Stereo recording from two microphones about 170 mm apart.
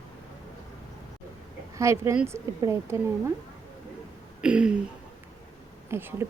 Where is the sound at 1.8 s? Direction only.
15° right (ahead or behind).